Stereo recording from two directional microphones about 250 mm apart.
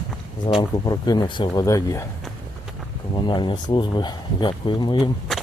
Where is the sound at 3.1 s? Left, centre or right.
Centre.